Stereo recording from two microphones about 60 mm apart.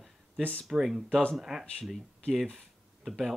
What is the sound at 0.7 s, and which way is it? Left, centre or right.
Speech, centre.